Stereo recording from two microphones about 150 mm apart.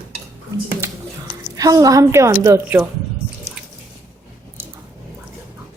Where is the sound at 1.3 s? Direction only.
25° right (ahead or behind).